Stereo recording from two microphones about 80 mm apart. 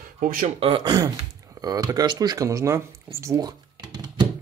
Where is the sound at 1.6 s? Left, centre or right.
Right.